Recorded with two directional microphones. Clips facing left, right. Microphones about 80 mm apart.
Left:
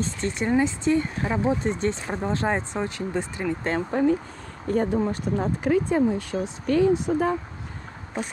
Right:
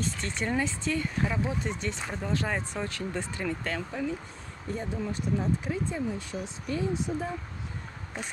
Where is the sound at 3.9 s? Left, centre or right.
Left.